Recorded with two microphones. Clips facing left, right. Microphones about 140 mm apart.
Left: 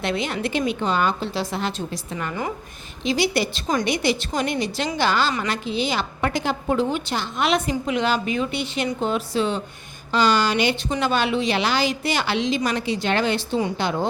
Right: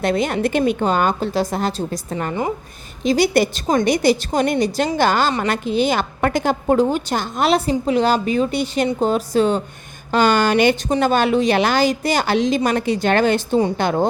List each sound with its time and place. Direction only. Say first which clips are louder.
0.0 s a woman's voice: right 6 dB; 45° right (ahead or behind)